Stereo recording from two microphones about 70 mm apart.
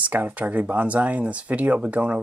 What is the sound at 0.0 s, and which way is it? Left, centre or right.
Speech, right.